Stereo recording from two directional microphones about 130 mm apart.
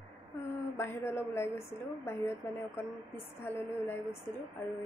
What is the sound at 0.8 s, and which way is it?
A woman's voice, 20° left (ahead or behind).